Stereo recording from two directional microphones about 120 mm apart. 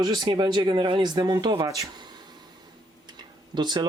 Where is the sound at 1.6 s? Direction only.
30° right (ahead or behind).